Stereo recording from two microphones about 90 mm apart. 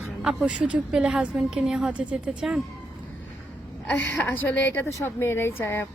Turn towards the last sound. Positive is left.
turn(degrees=25)  # may be behind; listen again after turning